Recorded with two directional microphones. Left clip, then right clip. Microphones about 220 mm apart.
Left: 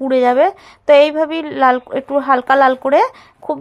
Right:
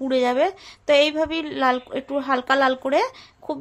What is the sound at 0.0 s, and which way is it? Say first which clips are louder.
A woman's voice: left 8 dB; 20° left (ahead or behind).